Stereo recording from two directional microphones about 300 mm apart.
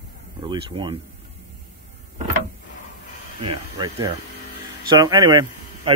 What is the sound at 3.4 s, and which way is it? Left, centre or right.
Speech, centre.